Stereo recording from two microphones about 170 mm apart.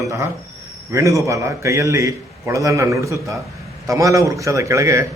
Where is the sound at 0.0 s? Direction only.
15° right (ahead or behind).